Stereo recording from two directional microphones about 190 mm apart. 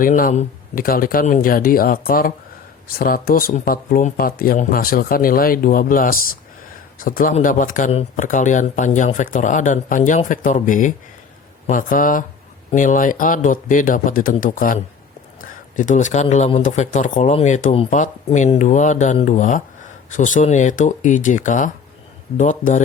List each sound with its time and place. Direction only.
0.0 s speech: 45° left (ahead or behind)